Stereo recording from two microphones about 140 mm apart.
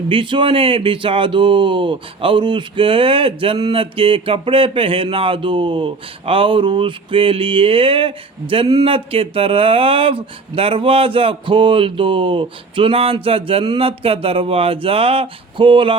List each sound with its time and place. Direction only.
0.1 s speech: 35° right (ahead or behind)